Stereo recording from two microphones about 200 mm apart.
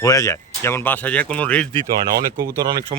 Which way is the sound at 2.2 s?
50° right (ahead or behind).